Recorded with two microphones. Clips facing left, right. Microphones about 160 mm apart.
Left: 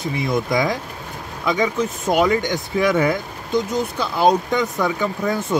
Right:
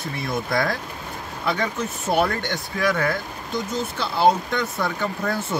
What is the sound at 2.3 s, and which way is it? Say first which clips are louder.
Speech: left 8 dB; 15° left (ahead or behind).